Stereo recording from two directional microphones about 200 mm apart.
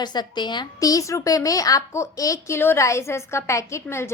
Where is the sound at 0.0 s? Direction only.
20° left (ahead or behind).